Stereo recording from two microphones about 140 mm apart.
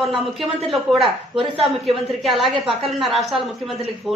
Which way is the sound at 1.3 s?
40° right (ahead or behind).